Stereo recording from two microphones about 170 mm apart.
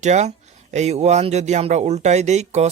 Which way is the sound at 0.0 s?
40° right (ahead or behind).